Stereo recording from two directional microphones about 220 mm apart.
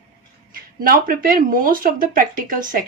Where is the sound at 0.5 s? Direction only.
40° right (ahead or behind).